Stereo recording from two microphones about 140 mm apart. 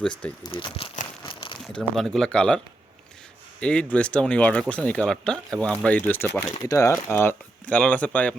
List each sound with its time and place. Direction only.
0.4 s speech: 35° left (ahead or behind)
1.2 s crumpling: 35° left (ahead or behind)
1.6 s speech: centre (ahead or behind)
3.6 s speech: 10° left (ahead or behind)